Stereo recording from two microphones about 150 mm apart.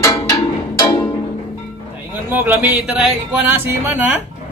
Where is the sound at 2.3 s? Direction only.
15° right (ahead or behind).